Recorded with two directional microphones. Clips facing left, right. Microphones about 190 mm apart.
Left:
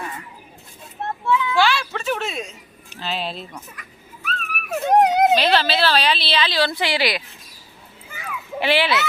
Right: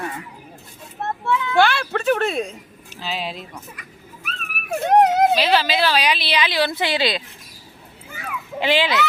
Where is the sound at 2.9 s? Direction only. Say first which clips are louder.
Left 1 dB; 10° right (ahead or behind).